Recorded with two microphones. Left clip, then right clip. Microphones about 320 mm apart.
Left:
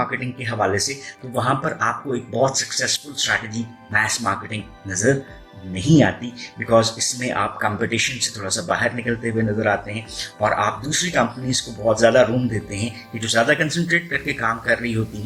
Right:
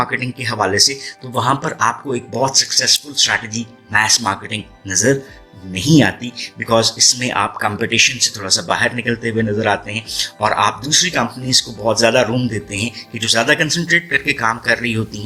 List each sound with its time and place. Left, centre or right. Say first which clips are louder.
0.0 s speech: right 5 dB; right